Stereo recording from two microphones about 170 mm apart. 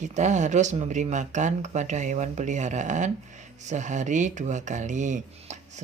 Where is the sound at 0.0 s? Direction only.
45° right (ahead or behind).